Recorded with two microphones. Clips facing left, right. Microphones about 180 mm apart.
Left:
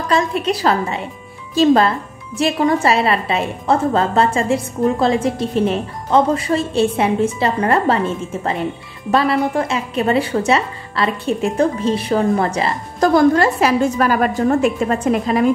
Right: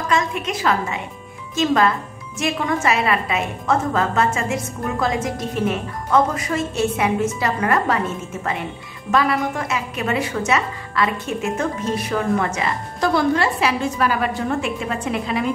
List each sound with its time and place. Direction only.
0.1 s a woman's voice: 35° left (ahead or behind)